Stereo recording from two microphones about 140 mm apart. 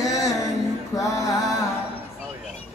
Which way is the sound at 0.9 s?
25° left (ahead or behind).